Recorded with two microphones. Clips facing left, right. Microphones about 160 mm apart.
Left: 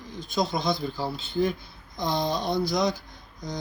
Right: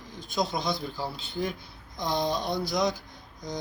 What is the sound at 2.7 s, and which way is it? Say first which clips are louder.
Speech: right 1 dB; centre (ahead or behind).